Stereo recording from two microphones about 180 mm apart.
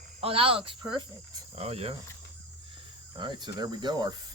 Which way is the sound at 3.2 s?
25° right (ahead or behind).